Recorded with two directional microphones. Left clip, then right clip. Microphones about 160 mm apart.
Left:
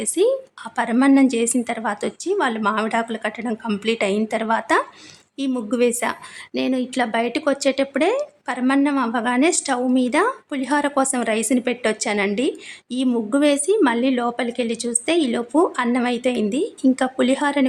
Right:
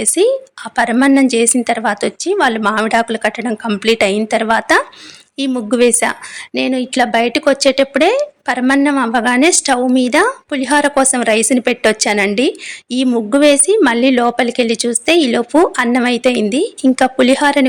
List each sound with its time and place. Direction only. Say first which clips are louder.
0.0 s speech: right 6 dB; 15° right (ahead or behind)